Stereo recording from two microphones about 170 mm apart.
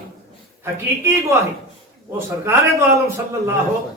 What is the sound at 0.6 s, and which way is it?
Speech, 15° right (ahead or behind).